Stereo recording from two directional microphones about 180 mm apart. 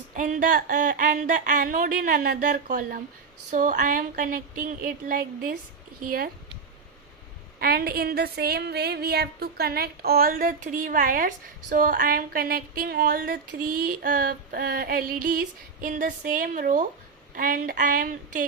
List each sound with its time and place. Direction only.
0.2 s a woman's voice: 45° right (ahead or behind)
7.6 s a woman's voice: 55° right (ahead or behind)